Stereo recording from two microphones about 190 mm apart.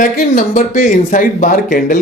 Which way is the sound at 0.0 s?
45° left (ahead or behind).